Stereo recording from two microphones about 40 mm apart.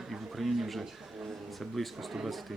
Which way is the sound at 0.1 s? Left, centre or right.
Centre.